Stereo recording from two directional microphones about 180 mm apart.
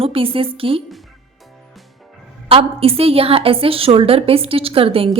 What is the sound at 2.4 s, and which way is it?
A woman's voice, 30° right (ahead or behind).